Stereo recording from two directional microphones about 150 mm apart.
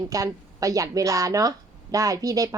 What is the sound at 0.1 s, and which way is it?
A woman's voice, 20° right (ahead or behind).